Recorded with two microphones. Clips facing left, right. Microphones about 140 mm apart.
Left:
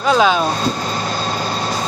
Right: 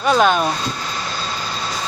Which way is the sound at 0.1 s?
Centre (ahead or behind).